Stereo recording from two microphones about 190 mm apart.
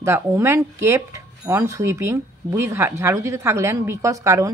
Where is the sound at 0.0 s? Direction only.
15° right (ahead or behind).